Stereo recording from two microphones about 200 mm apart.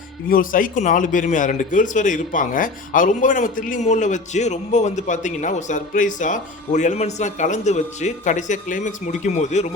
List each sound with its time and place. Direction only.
0.3 s a man's voice: 45° left (ahead or behind)